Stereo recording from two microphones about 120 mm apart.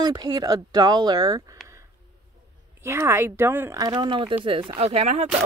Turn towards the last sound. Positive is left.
turn(degrees=-70)  # may be behind; listen again after turning